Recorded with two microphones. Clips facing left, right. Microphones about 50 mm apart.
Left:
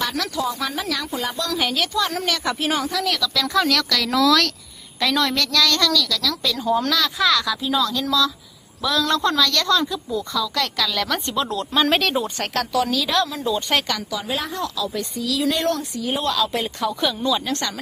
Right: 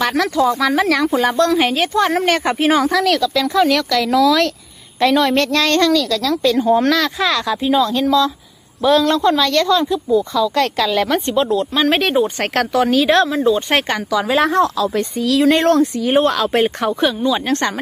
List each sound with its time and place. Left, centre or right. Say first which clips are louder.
0.0 s speech: right 8 dB; right
1.5 s speech: right 7 dB; right
2.0 s speech: right 11 dB; right
3.5 s speech: right 4 dB; centre
5.4 s speech: right 5 dB; right
9.0 s speech: right 5 dB; centre
10.3 s speech: right 7 dB; right
11.3 s speech: right 8 dB; right
11.7 s speech: left 2 dB; centre
11.9 s speech: right 6 dB; right
12.4 s speech: right 6 dB; right
14.1 s speech: right 11 dB; right
16.9 s speech: right 6 dB; right
17.4 s speech: right 7 dB; right